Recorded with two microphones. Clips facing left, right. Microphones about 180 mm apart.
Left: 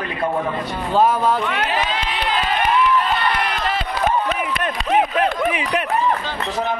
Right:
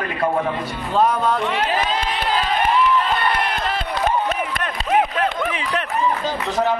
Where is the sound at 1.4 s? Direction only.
30° right (ahead or behind).